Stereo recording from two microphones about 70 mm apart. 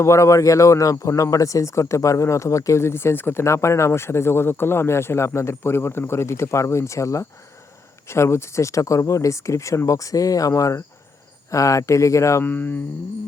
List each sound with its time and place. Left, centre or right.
0.0 s speech: left
12.5 s mantra: left